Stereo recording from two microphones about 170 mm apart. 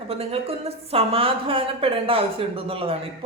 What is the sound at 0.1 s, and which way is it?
A woman's voice, 35° right (ahead or behind).